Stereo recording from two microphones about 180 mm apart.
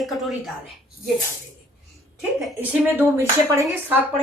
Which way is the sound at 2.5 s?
10° right (ahead or behind).